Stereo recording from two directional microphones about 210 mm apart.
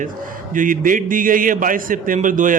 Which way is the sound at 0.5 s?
40° right (ahead or behind).